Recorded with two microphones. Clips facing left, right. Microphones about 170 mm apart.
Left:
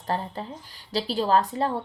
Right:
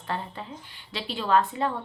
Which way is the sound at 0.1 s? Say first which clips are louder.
Left 3 dB; 35° left (ahead or behind).